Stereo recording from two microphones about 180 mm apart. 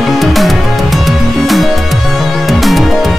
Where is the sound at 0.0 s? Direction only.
Centre (ahead or behind).